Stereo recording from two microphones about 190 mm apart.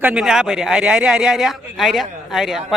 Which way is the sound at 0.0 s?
5° right (ahead or behind).